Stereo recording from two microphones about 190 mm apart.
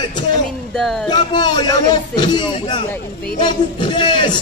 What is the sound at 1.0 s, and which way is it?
A man's voice, 20° left (ahead or behind).